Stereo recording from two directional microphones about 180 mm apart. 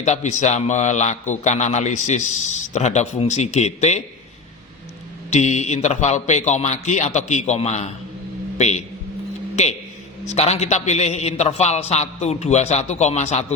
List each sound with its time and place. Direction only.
0.0 s a man's voice: 40° left (ahead or behind)
5.3 s a man's voice: 40° left (ahead or behind)
10.2 s a man's voice: 35° left (ahead or behind)